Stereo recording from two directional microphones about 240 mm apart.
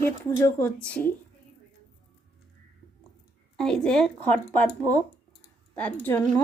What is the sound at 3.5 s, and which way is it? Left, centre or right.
A woman's voice, centre.